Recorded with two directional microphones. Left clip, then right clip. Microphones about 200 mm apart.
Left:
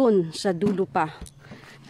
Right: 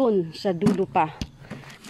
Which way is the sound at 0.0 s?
35° left (ahead or behind).